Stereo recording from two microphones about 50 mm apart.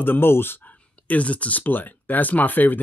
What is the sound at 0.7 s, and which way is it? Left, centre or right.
Speech, left.